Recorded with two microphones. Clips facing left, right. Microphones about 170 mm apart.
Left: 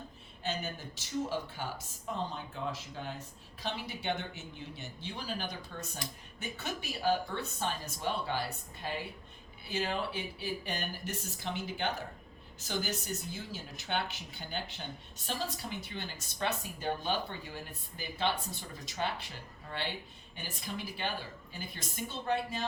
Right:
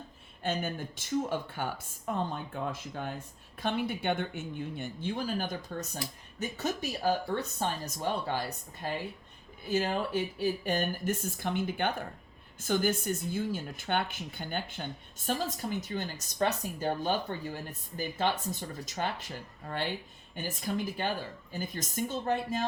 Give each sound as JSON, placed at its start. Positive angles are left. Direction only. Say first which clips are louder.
{"t": 0.4, "sound": "speech", "louder": "right 5 dB", "side_deg": -50}